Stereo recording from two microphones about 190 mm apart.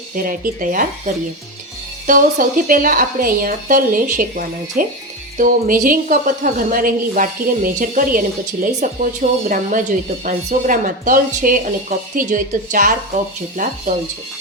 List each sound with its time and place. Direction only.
0.2 s a woman's voice: 50° right (ahead or behind)